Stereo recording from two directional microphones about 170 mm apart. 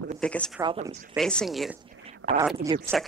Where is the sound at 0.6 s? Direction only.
30° right (ahead or behind).